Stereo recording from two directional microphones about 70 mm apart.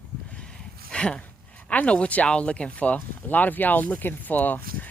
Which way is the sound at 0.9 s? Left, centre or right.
Centre.